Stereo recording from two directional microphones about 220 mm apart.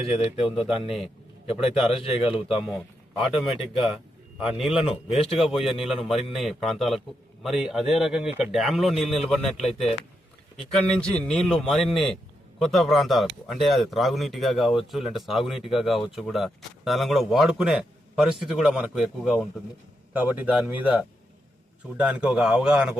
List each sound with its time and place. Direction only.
0.1 s speech: 25° left (ahead or behind)
0.9 s speech: centre (ahead or behind)
1.9 s speech: 25° left (ahead or behind)
3.2 s speech: centre (ahead or behind)
4.4 s speech: centre (ahead or behind)